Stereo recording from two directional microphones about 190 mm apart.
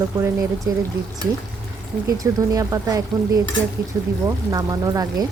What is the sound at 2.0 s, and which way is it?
Speech, 20° right (ahead or behind).